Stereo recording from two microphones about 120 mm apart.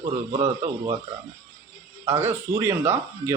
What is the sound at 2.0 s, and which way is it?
Speech, 20° right (ahead or behind).